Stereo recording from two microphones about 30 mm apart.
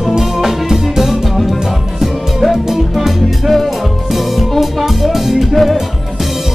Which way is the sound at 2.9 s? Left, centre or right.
Centre.